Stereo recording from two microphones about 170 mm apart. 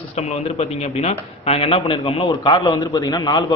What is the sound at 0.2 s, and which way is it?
A man's voice, 40° left (ahead or behind).